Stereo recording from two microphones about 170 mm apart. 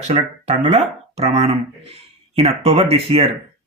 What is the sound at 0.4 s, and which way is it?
Speech, 40° right (ahead or behind).